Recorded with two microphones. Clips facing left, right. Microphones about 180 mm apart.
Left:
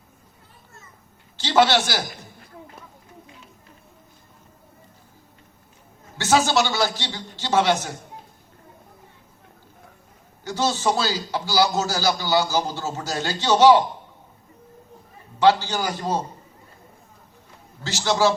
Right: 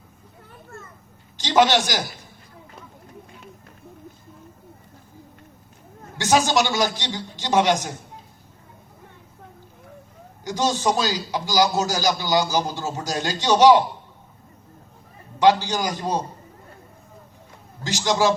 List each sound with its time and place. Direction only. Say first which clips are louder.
0.5 s children playing: right 11 dB; 60° right (ahead or behind)
1.4 s a man's voice: even; 15° right (ahead or behind)
6.1 s a man's voice: even; 15° right (ahead or behind)
10.4 s a man's voice: right 1 dB; 15° right (ahead or behind)
15.4 s a man's voice: right 1 dB; 15° right (ahead or behind)
17.8 s a man's voice: even; 15° right (ahead or behind)